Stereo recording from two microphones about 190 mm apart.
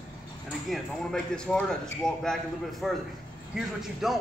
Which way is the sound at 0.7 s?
5° left (ahead or behind).